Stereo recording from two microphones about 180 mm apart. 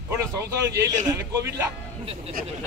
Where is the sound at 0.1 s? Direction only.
15° right (ahead or behind).